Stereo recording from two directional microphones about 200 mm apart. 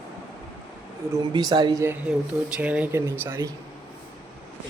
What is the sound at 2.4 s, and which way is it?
Speech, 5° right (ahead or behind).